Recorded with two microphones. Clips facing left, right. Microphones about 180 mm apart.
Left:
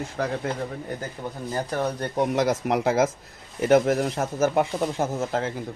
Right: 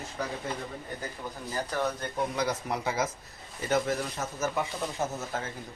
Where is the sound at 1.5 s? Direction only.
30° left (ahead or behind).